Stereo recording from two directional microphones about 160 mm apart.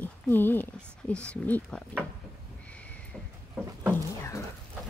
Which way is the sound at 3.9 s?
20° left (ahead or behind).